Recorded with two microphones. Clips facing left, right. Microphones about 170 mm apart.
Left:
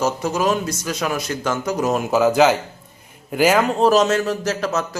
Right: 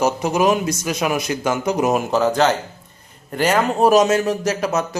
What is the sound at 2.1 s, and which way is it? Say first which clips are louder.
Speech: left 2 dB; 5° left (ahead or behind).